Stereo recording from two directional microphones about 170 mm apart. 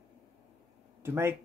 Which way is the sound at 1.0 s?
15° right (ahead or behind).